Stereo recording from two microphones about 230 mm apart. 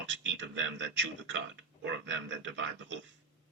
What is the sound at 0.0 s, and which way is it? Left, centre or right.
A man's voice, right.